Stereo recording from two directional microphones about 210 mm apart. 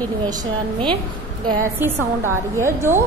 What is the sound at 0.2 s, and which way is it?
A woman's voice, 20° right (ahead or behind).